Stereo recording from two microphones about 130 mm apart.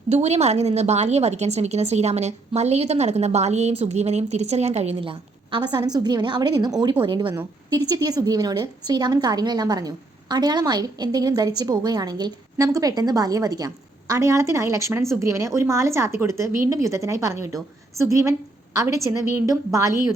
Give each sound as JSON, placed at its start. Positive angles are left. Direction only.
{"t": 0.1, "sound": "a woman's voice", "side_deg": -55}